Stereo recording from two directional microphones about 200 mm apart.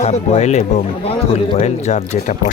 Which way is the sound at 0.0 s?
35° left (ahead or behind).